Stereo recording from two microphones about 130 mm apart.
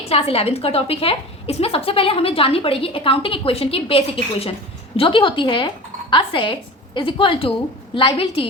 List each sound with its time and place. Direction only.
0.1 s a woman's voice: 50° left (ahead or behind)